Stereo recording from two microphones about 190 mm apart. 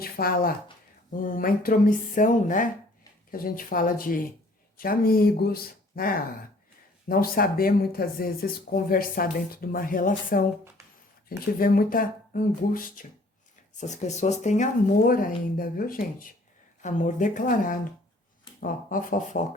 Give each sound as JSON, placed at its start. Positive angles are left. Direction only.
{"t": 0.0, "sound": "speech", "side_deg": 50}